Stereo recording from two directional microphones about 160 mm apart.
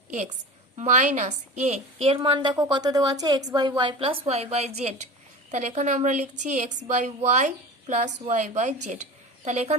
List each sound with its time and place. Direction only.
0.8 s a woman's voice: 50° right (ahead or behind)